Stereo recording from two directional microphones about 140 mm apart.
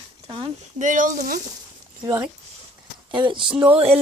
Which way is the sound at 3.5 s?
10° right (ahead or behind).